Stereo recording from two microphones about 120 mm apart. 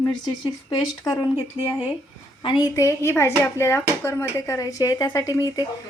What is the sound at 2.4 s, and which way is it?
Speech, 35° left (ahead or behind).